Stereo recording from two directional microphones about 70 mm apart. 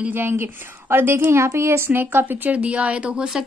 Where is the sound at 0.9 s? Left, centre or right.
Right.